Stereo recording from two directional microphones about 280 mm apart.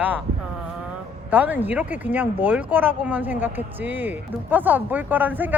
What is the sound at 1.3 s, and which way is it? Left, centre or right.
Speech, centre.